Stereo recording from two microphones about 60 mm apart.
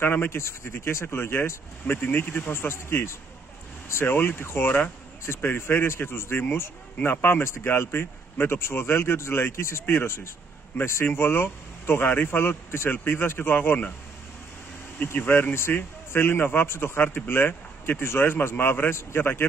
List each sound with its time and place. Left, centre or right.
0.0 s speech: left
4.6 s speech: left
5.2 s speech: left
15.1 s speech: left